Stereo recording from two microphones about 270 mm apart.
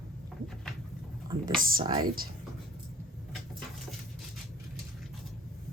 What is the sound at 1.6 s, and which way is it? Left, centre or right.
Speech, right.